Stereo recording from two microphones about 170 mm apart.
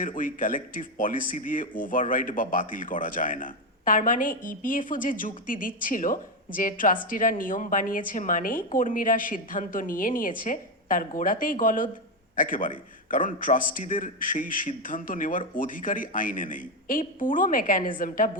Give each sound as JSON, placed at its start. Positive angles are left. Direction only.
{"t": 0.0, "sound": "speech", "side_deg": 50}